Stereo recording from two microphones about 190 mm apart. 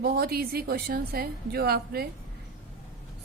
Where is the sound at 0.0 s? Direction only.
55° right (ahead or behind).